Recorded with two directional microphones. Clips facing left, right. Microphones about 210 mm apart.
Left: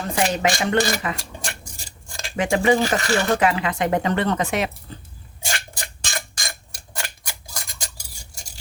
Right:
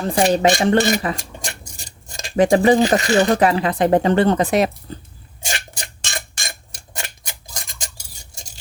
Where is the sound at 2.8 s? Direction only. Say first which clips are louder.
Right 6 dB; 20° right (ahead or behind).